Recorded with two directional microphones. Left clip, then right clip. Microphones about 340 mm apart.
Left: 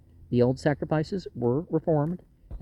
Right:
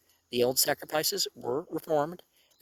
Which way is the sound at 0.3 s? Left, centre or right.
Right.